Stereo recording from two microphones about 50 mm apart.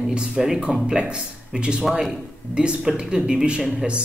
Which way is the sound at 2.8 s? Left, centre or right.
Centre.